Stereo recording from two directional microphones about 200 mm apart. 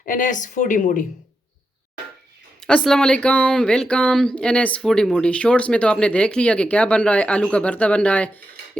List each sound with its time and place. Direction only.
0.0 s speech: 40° left (ahead or behind)
2.6 s speech: 5° left (ahead or behind)